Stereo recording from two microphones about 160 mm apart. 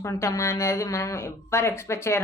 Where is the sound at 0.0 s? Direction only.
20° left (ahead or behind).